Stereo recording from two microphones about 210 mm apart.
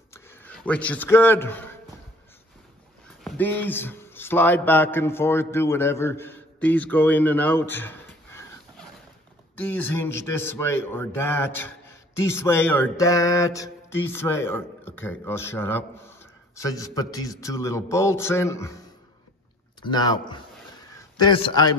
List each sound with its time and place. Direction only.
0.1 s a man's voice: 10° left (ahead or behind)
3.3 s a man's voice: 10° left (ahead or behind)
9.6 s mantra: 10° left (ahead or behind)
19.8 s speech: 20° left (ahead or behind)